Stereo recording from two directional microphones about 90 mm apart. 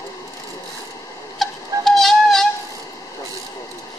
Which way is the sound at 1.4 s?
5° left (ahead or behind).